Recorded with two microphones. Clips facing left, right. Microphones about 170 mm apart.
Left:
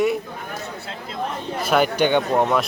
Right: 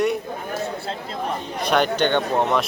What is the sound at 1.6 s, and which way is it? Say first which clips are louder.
Speech: left 1 dB; 5° left (ahead or behind).